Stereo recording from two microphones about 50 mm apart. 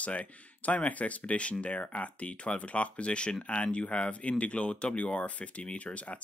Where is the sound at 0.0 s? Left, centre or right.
Left.